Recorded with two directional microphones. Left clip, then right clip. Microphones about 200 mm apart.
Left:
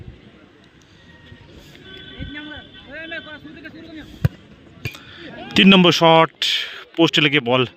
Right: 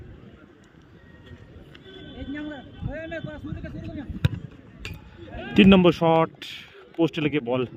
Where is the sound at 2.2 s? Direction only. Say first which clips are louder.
Even; 55° right (ahead or behind).